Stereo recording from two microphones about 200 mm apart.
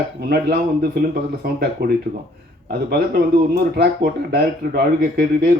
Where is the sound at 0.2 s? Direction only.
55° right (ahead or behind).